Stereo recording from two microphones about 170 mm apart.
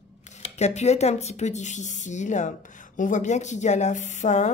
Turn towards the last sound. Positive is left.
turn(degrees=45)  # may be behind; listen again after turning